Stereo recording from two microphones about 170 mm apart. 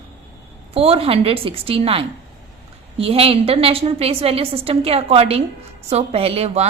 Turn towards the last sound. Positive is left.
turn(degrees=-40)  # may be behind; listen again after turning